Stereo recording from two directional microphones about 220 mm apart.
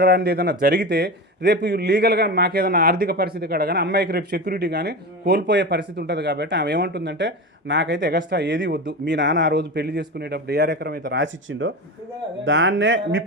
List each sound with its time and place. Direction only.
0.0 s a man's voice: 45° right (ahead or behind)